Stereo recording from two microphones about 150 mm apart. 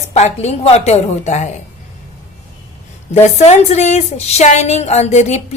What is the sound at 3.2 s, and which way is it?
A woman's voice, 50° left (ahead or behind).